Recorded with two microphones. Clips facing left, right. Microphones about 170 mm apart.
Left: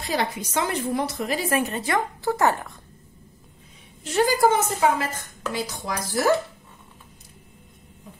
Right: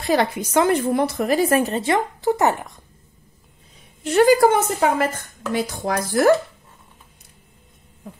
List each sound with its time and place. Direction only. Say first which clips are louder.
0.1 s a woman's voice: right 7 dB; 55° right (ahead or behind)
1.6 s a woman's voice: right 4 dB; 30° right (ahead or behind)
4.0 s a woman's voice: right 6 dB; 60° right (ahead or behind)